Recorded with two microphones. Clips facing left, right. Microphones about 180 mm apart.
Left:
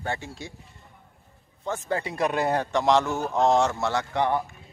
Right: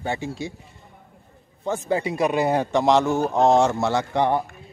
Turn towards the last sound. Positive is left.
turn(degrees=-20)  # may be behind; listen again after turning